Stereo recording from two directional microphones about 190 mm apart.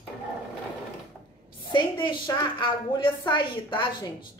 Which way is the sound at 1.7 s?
25° left (ahead or behind).